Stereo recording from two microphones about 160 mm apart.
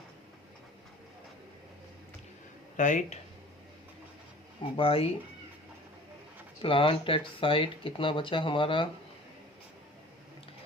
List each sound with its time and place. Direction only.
2.7 s speech: 50° left (ahead or behind)
4.8 s speech: 35° left (ahead or behind)
6.6 s speech: 35° left (ahead or behind)